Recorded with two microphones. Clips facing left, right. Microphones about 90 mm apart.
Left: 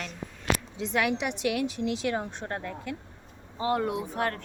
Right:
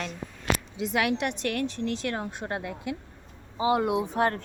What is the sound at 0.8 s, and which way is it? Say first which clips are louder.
A woman's voice: right 2 dB; 5° right (ahead or behind).